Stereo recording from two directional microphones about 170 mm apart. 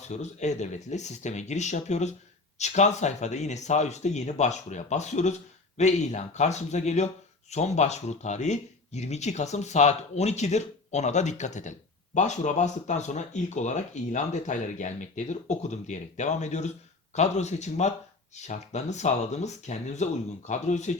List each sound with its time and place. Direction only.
0.1 s speech: 45° left (ahead or behind)